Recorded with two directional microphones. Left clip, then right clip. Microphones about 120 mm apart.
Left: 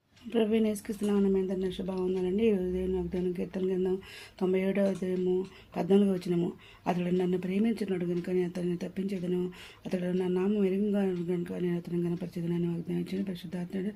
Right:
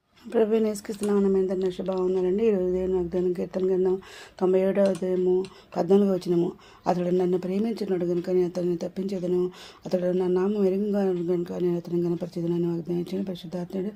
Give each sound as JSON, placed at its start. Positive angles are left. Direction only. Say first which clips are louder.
{"t": 0.3, "sound": "speech", "louder": "right 6 dB", "side_deg": -40}
{"t": 2.0, "sound": "speech", "louder": "right 5 dB", "side_deg": -35}
{"t": 5.7, "sound": "speech", "louder": "right 5 dB", "side_deg": -50}